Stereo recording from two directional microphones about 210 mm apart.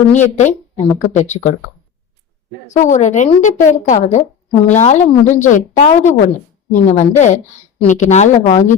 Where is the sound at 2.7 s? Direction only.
35° left (ahead or behind).